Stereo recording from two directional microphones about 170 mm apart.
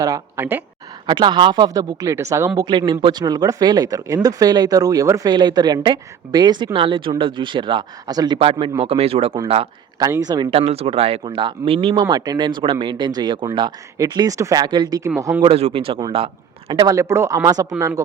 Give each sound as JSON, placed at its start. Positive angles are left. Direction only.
{"t": 0.0, "sound": "speech", "side_deg": -15}
{"t": 1.0, "sound": "speech", "side_deg": -25}
{"t": 2.6, "sound": "speech", "side_deg": -25}
{"t": 10.0, "sound": "speech", "side_deg": -20}
{"t": 10.5, "sound": "speech", "side_deg": -35}
{"t": 12.0, "sound": "speech", "side_deg": -20}
{"t": 15.4, "sound": "speech", "side_deg": -35}